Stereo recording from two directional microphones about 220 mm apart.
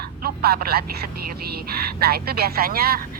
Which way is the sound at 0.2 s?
45° right (ahead or behind).